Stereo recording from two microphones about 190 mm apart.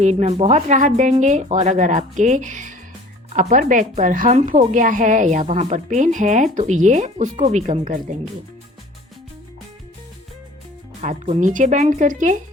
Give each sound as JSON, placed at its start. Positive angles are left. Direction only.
{"t": 0.0, "sound": "a woman's voice", "side_deg": -35}
{"t": 11.0, "sound": "a woman's voice", "side_deg": -35}